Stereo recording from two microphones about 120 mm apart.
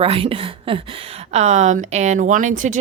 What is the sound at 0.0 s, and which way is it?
A woman's voice, 50° right (ahead or behind).